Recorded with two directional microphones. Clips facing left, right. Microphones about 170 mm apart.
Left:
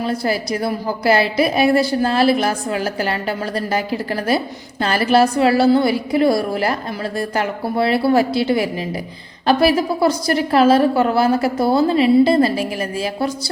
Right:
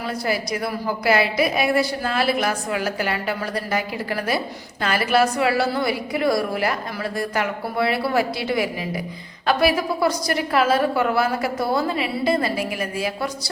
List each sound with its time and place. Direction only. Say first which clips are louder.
0.0 s a woman's voice: left 4 dB; 30° left (ahead or behind)